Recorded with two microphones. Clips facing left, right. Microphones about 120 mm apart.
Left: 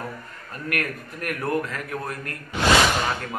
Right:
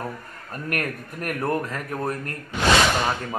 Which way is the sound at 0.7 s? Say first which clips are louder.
Even; 40° right (ahead or behind).